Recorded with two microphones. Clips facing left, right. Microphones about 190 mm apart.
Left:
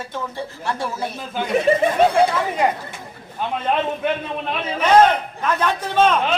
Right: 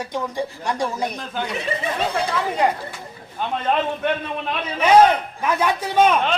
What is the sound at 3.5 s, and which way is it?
Speech, 5° left (ahead or behind).